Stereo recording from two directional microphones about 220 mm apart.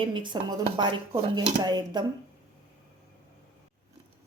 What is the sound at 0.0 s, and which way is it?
Speech, 25° right (ahead or behind).